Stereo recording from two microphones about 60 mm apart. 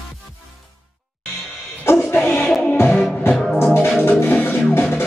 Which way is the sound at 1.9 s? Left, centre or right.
Left.